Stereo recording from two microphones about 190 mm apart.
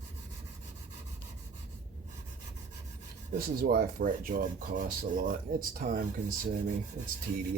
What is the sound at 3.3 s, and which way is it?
Speech, 50° right (ahead or behind).